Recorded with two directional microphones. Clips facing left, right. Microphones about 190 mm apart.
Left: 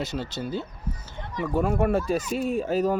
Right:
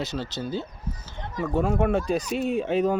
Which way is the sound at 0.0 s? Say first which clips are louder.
Even; 50° left (ahead or behind).